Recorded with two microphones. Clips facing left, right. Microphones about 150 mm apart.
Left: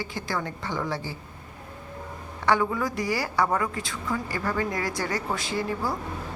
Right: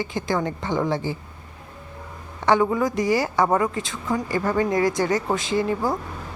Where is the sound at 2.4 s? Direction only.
20° right (ahead or behind).